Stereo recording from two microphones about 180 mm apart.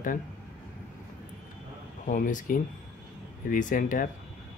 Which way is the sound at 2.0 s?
45° left (ahead or behind).